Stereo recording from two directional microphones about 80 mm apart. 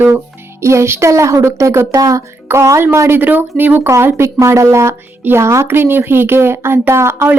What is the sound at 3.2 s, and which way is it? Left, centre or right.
A woman's voice, right.